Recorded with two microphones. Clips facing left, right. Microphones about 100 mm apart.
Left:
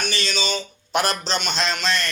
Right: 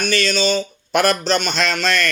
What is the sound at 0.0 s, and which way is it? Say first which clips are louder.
Speech: right 7 dB; 50° right (ahead or behind).